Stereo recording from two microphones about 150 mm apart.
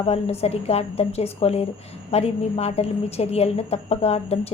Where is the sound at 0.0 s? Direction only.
45° left (ahead or behind).